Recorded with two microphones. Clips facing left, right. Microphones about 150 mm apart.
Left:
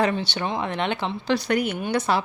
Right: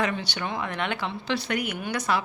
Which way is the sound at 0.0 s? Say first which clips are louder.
Left 5 dB; 30° left (ahead or behind).